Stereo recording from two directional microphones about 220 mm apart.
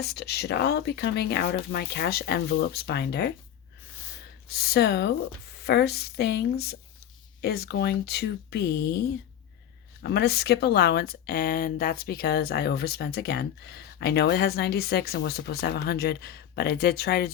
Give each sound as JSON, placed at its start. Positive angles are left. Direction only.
{"t": 0.0, "sound": "speech", "side_deg": 50}
{"t": 4.4, "sound": "speech", "side_deg": 45}
{"t": 10.0, "sound": "speech", "side_deg": 50}